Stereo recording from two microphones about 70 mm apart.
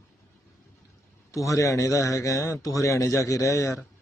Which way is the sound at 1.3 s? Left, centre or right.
Left.